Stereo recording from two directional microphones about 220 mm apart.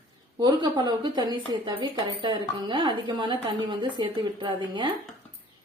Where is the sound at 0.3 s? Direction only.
20° right (ahead or behind).